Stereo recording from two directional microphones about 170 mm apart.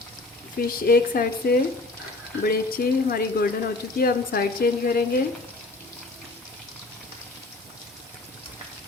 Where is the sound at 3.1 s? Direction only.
60° left (ahead or behind).